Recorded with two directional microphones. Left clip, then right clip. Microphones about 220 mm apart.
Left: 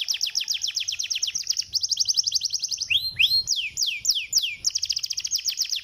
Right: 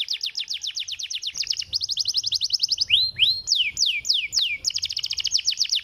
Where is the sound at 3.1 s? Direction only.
25° right (ahead or behind).